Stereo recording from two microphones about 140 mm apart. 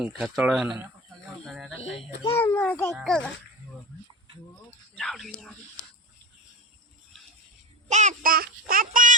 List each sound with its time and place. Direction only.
0.0 s speech: 5° right (ahead or behind)
2.4 s a child's voice: 15° left (ahead or behind)
2.9 s speech: centre (ahead or behind)
4.9 s speech: centre (ahead or behind)
7.9 s child singing: 60° right (ahead or behind); by 9.1 s 75° right (ahead or behind)